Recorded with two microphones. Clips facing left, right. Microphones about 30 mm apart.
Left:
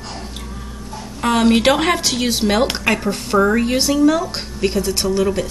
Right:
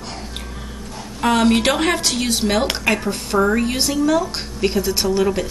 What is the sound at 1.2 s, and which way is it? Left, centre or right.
Speech, centre.